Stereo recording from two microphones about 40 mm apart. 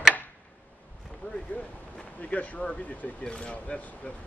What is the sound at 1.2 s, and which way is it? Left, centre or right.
Speech, left.